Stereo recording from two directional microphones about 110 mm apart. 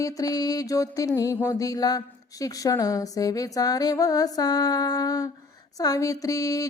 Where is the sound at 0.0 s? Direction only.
35° left (ahead or behind).